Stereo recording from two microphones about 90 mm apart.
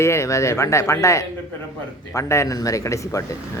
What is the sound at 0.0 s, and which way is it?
A man's voice, 30° left (ahead or behind).